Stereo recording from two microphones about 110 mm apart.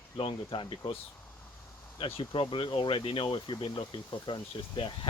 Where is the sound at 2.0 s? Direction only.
55° left (ahead or behind).